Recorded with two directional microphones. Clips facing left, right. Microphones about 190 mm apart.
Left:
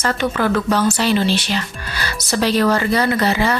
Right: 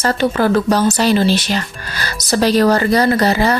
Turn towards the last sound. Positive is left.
turn(degrees=-40)  # may be behind; listen again after turning